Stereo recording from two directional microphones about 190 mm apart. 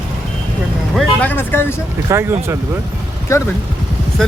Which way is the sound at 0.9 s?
10° left (ahead or behind).